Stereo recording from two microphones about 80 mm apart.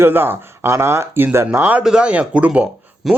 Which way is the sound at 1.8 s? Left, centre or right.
Centre.